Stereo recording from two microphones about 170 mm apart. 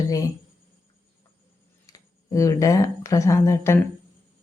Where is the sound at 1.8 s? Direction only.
20° left (ahead or behind).